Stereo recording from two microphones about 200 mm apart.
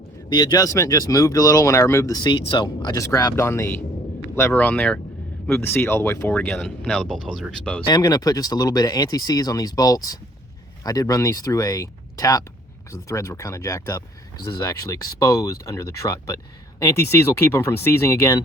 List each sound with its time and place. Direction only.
0.3 s speech: 20° left (ahead or behind); by 7.9 s 5° left (ahead or behind)
7.9 s speech: 20° left (ahead or behind)